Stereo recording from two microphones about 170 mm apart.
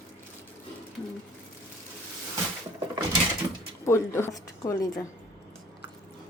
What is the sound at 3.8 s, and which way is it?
A woman's voice, 15° left (ahead or behind).